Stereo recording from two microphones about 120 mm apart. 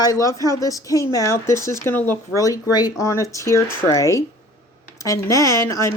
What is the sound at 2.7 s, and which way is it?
Speech, 30° left (ahead or behind).